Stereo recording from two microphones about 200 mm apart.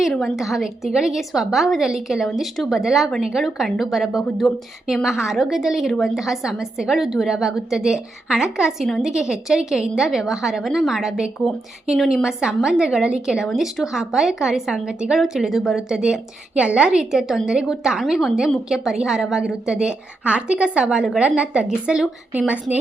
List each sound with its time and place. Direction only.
0.0 s a woman's voice: centre (ahead or behind)